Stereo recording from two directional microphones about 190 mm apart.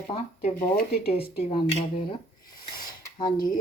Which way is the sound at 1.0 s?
30° left (ahead or behind).